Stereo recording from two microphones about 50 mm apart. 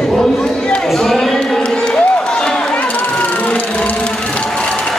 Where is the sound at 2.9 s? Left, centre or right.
Left.